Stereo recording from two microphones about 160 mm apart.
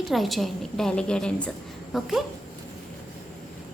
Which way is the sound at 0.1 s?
Centre (ahead or behind).